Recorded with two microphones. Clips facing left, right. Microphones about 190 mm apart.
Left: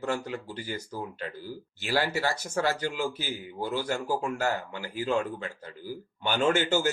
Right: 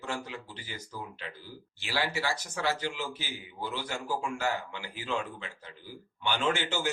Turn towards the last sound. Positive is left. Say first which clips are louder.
# left 6 dB
turn(degrees=40)  # may be behind; listen again after turning